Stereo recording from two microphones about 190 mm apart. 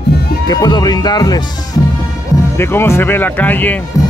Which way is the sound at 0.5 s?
20° left (ahead or behind).